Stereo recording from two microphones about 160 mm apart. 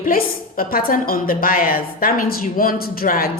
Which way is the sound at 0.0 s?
60° left (ahead or behind).